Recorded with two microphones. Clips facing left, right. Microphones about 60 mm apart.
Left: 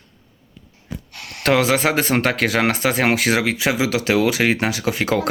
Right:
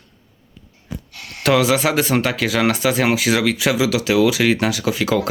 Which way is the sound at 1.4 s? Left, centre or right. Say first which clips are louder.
Right 1 dB; left.